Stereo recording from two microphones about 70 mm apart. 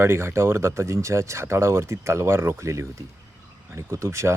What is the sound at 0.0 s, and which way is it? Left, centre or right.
Speech, right.